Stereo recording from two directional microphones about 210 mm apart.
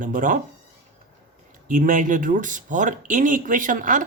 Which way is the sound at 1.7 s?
40° right (ahead or behind).